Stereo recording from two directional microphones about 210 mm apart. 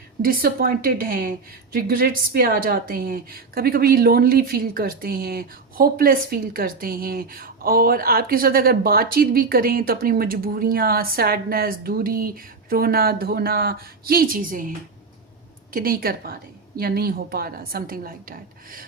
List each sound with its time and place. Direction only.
0.2 s a woman's voice: 45° right (ahead or behind)
15.7 s a woman's voice: 45° right (ahead or behind)